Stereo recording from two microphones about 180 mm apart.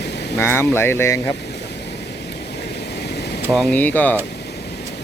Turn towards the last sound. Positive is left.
turn(degrees=10)  # may be behind; listen again after turning